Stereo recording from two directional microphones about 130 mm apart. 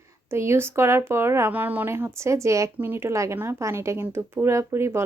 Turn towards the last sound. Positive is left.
turn(degrees=-20)  # may be behind; listen again after turning